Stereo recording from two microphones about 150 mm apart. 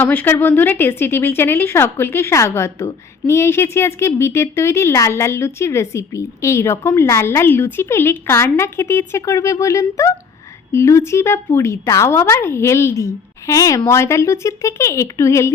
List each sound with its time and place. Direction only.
0.0 s a woman's voice: 10° left (ahead or behind)